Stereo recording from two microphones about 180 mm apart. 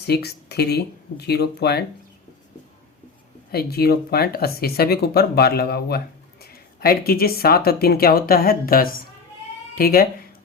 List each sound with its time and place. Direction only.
0.1 s speech: 65° left (ahead or behind)
3.5 s speech: 60° left (ahead or behind)